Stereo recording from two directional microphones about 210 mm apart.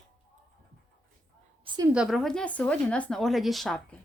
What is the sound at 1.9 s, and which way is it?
Speech, 5° right (ahead or behind).